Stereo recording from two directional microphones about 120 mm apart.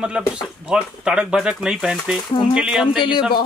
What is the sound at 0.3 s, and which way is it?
Speech, 5° right (ahead or behind).